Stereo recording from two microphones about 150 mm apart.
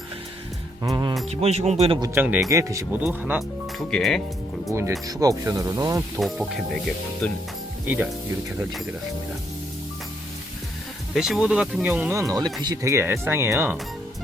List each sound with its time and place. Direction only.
0.8 s speech: 25° right (ahead or behind)
1.3 s speech: 45° right (ahead or behind)
2.1 s speech: 10° right (ahead or behind)
2.5 s speech: 20° right (ahead or behind)
3.0 s speech: 5° right (ahead or behind)
4.7 s speech: 20° right (ahead or behind)
6.1 s speech: centre (ahead or behind)
11.1 s speech: 5° right (ahead or behind)